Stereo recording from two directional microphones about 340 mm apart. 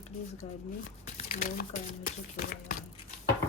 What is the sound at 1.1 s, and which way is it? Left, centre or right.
Speech, left.